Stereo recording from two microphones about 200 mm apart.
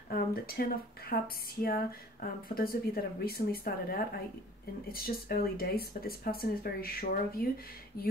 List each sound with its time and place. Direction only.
0.1 s speech: 50° left (ahead or behind)